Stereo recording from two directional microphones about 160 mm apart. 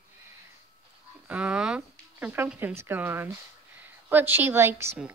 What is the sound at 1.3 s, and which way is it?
Speech, 5° right (ahead or behind).